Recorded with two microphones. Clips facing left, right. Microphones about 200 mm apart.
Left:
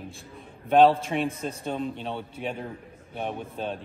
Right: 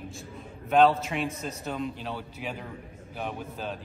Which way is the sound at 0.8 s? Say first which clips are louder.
Left 3 dB; 30° left (ahead or behind).